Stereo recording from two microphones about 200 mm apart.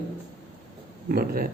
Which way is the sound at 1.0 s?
45° right (ahead or behind).